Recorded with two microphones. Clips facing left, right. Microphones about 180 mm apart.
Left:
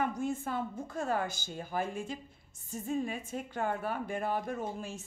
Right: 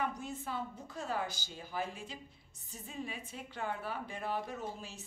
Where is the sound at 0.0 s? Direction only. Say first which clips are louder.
Left 6 dB; 50° left (ahead or behind).